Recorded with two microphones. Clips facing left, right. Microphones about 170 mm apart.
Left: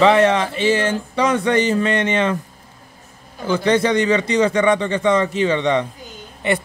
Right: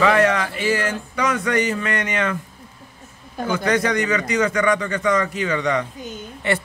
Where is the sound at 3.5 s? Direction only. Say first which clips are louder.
Left 4 dB; 25° left (ahead or behind).